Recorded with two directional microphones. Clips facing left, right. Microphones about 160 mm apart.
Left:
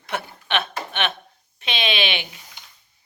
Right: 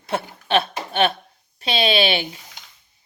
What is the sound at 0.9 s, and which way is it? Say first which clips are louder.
Speech: right 7 dB; 35° right (ahead or behind).